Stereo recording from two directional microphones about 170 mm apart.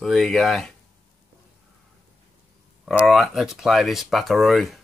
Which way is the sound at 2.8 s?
Centre (ahead or behind).